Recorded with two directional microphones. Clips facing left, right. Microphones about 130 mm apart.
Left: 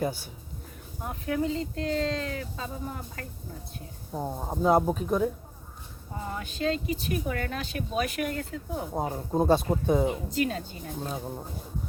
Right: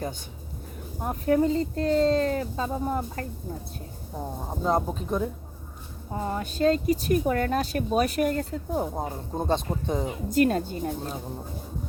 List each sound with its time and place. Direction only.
0.0 s speech: 5° left (ahead or behind)
1.0 s speech: 40° right (ahead or behind)
4.2 s speech: 10° left (ahead or behind)
6.1 s speech: 40° right (ahead or behind)
9.0 s speech: 5° left (ahead or behind)
10.3 s speech: 50° right (ahead or behind)